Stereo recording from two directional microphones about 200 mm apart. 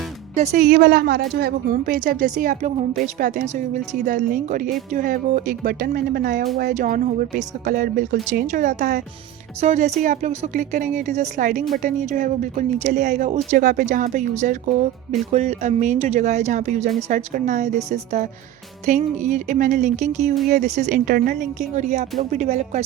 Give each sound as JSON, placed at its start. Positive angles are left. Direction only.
{"t": 0.3, "sound": "speech", "side_deg": -35}
{"t": 0.7, "sound": "speech", "side_deg": -55}